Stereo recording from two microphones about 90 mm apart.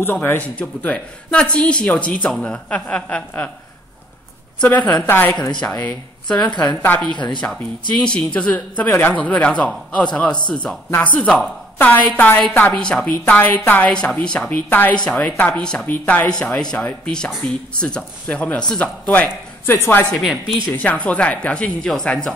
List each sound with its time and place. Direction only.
0.0 s speech: 25° left (ahead or behind)
4.6 s speech: 15° left (ahead or behind)
6.2 s a woman's voice: 10° left (ahead or behind)
11.8 s a woman's voice: 20° left (ahead or behind)
14.7 s a woman's voice: 20° left (ahead or behind)
15.9 s a woman's voice: 20° left (ahead or behind)
16.3 s speech: 10° left (ahead or behind); by 20.1 s 25° left (ahead or behind)
20.1 s a woman's voice: centre (ahead or behind)
20.7 s speech: 15° left (ahead or behind)